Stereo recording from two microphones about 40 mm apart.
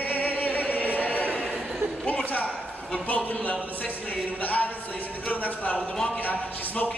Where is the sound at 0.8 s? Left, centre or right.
Left.